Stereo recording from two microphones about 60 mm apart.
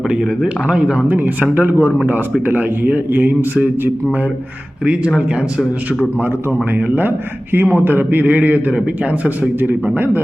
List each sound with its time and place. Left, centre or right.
0.1 s speech: centre
1.0 s a man's voice: right
4.9 s speech: centre
6.7 s a man's voice: right